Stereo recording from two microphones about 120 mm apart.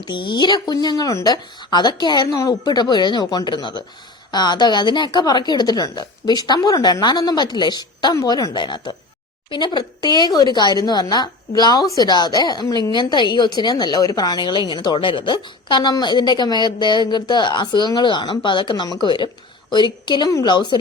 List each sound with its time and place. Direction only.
0.0 s a woman's voice: 40° left (ahead or behind)